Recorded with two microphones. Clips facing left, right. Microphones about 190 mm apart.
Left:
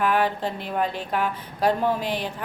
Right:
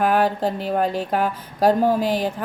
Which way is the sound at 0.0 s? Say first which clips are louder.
Right 4 dB; 40° right (ahead or behind).